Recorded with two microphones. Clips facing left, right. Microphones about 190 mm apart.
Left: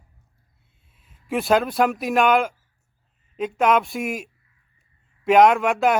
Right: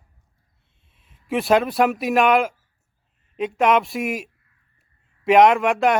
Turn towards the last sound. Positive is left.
turn(degrees=0)  # may be behind; listen again after turning